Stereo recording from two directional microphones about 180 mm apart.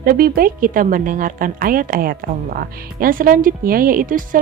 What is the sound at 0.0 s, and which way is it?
A woman's voice, 55° right (ahead or behind).